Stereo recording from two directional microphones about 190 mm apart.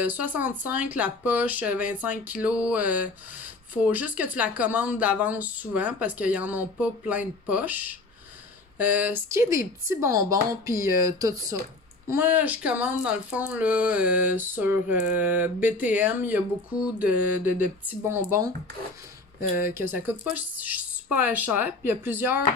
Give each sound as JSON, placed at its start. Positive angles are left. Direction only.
{"t": 0.0, "sound": "speech", "side_deg": -10}
{"t": 19.5, "sound": "speech", "side_deg": -10}